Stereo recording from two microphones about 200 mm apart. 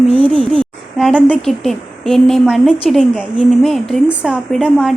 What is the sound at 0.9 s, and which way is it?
A woman's voice, centre (ahead or behind).